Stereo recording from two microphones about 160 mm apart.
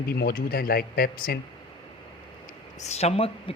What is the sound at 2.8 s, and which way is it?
Speech, 40° left (ahead or behind).